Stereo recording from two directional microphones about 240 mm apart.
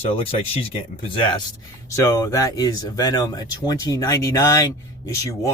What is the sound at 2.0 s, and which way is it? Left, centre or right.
Speech, centre.